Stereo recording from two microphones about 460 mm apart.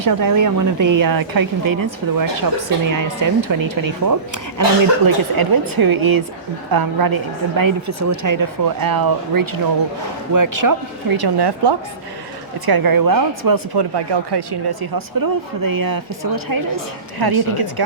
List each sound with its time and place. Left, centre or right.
0.0 s a woman's voice: right
12.6 s a woman's voice: right